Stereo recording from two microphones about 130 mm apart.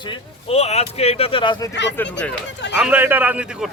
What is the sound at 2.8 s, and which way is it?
Speech, 15° right (ahead or behind).